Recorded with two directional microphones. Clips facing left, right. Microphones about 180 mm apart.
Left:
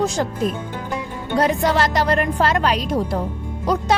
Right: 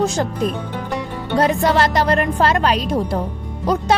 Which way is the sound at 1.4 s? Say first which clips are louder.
Right 2 dB; 30° right (ahead or behind).